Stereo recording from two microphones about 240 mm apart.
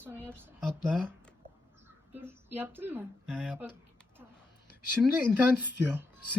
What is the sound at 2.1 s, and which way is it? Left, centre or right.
A woman's voice, centre.